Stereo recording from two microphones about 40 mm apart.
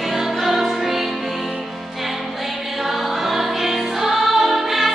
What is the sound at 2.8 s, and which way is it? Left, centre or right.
Music, centre.